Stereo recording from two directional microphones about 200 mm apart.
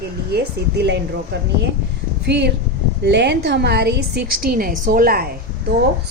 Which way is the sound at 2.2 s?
55° right (ahead or behind).